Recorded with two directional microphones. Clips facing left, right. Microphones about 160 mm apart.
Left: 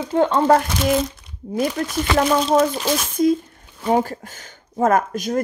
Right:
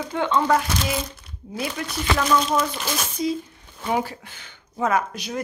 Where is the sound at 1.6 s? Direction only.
45° left (ahead or behind).